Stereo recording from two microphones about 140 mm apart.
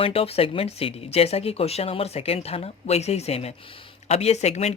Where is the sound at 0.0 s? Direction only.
45° left (ahead or behind).